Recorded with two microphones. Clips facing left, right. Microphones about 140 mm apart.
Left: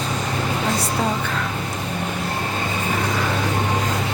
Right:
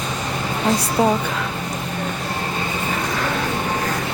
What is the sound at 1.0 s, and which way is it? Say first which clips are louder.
Speech: right 7 dB; 15° right (ahead or behind).